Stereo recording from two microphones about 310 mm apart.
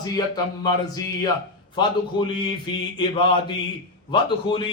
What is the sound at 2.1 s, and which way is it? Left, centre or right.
A man's voice, centre.